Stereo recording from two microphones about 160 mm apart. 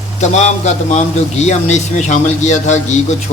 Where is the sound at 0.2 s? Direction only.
45° left (ahead or behind).